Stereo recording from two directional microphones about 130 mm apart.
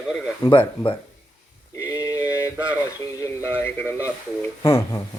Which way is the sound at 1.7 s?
25° left (ahead or behind).